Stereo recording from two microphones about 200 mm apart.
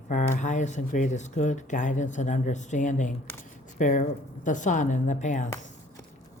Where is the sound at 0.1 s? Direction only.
40° left (ahead or behind).